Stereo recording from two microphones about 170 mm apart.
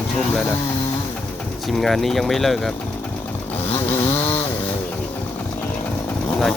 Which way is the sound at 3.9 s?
15° left (ahead or behind).